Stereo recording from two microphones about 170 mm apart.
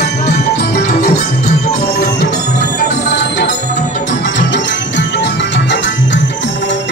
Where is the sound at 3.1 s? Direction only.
85° left.